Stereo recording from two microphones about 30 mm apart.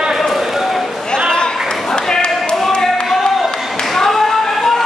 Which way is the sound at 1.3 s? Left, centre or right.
Left.